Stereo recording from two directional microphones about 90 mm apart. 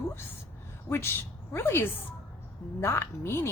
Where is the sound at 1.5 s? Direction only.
30° left (ahead or behind).